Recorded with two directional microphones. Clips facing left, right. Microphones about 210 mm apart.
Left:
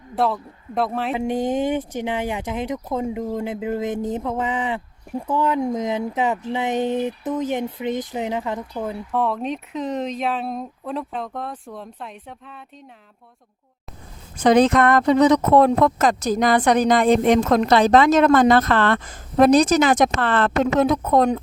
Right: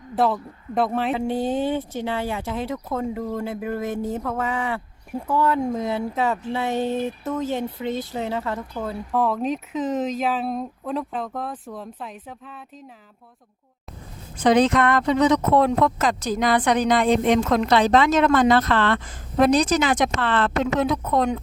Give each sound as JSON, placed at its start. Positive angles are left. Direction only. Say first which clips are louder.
{"t": 0.2, "sound": "speech", "louder": "even", "side_deg": 0}
{"t": 1.1, "sound": "speech", "louder": "left 1 dB", "side_deg": 15}
{"t": 9.1, "sound": "speech", "louder": "right 1 dB", "side_deg": 0}
{"t": 14.4, "sound": "speech", "louder": "left 2 dB", "side_deg": 45}